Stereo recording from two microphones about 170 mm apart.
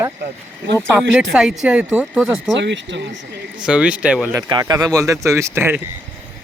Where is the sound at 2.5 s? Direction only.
90° right.